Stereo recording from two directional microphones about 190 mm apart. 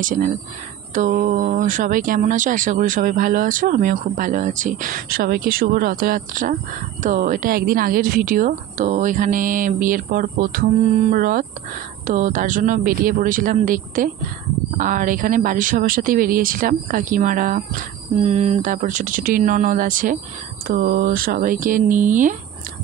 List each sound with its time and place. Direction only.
0.0 s speech: 40° right (ahead or behind)